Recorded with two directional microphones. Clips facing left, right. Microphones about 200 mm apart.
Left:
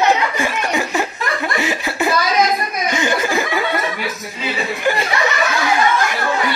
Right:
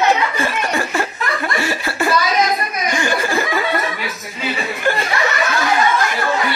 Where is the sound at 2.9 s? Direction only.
20° left (ahead or behind).